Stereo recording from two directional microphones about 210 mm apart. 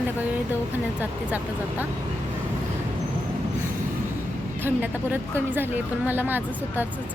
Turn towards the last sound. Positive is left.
turn(degrees=-10)  # may be behind; listen again after turning